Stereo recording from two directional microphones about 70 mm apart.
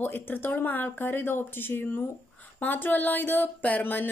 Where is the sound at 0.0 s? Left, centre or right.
Left.